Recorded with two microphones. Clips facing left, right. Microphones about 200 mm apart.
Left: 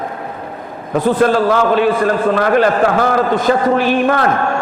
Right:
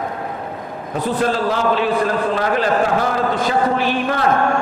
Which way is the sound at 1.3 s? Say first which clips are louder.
Left 5 dB; 55° left (ahead or behind).